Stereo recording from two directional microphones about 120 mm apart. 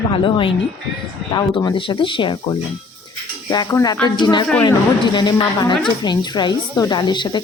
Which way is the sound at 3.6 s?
30° left (ahead or behind).